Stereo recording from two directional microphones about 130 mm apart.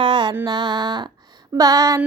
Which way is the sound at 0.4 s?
35° right (ahead or behind).